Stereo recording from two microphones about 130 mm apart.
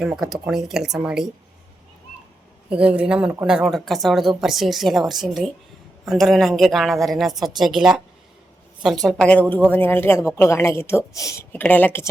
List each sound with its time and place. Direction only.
0.0 s a woman's voice: centre (ahead or behind)
2.6 s a woman's voice: 10° right (ahead or behind); by 11.3 s 25° left (ahead or behind)
11.5 s a woman's voice: 15° left (ahead or behind)